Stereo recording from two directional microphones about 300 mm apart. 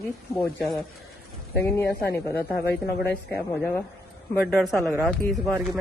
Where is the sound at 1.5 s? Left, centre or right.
Centre.